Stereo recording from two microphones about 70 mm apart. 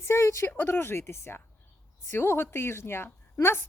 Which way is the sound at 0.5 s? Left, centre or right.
Left.